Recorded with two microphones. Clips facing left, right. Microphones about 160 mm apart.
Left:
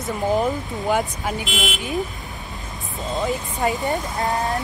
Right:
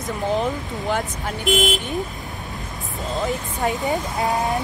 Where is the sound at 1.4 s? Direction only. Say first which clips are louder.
Right 7 dB; 45° right (ahead or behind).